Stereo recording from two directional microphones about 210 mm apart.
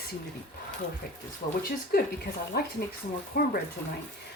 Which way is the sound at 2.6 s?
45° left (ahead or behind).